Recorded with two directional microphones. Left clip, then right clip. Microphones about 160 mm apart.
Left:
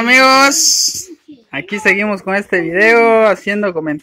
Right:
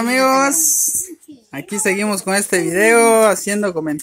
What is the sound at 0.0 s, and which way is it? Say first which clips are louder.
Speech: left 6 dB; centre (ahead or behind).